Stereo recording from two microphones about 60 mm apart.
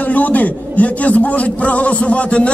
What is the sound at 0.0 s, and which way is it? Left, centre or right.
A man's voice, left.